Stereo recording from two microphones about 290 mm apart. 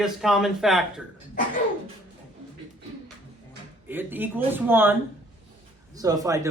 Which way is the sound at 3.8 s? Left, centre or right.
Centre.